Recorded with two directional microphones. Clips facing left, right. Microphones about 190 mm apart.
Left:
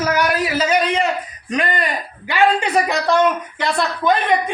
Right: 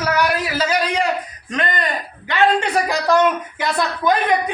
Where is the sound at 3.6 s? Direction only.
5° right (ahead or behind).